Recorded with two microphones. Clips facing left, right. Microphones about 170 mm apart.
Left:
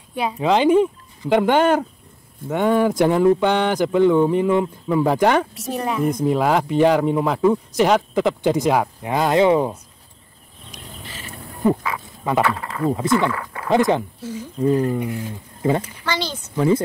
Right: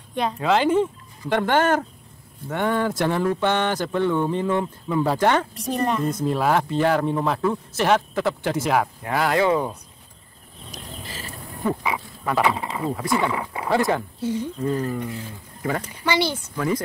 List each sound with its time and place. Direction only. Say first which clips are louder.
0.1 s speech: left 2 dB; 5° left (ahead or behind)
5.6 s a woman's voice: even; 5° left (ahead or behind)
6.0 s speech: left 3 dB; 15° left (ahead or behind)
10.7 s a sound: right 1 dB; 40° right (ahead or behind)
12.4 s speech: left 1 dB; 15° right (ahead or behind)
13.7 s speech: left 4 dB; 20° left (ahead or behind)
16.1 s speech: right 3 dB; 10° right (ahead or behind)
16.5 s speech: left 8 dB; 25° left (ahead or behind)